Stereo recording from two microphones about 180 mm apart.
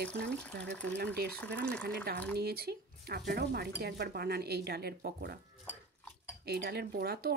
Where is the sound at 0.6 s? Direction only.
5° left (ahead or behind).